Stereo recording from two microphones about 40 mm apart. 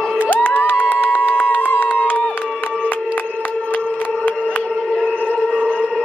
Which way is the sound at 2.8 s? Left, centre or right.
Left.